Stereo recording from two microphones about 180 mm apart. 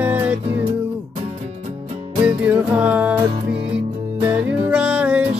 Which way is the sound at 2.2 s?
5° right (ahead or behind).